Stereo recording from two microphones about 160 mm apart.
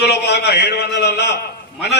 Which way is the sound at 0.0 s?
90° left.